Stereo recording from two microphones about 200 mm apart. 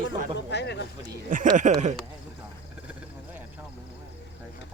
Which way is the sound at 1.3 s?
40° right (ahead or behind).